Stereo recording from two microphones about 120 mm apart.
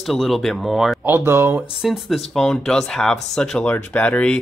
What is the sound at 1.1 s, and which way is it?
Speech, 20° right (ahead or behind).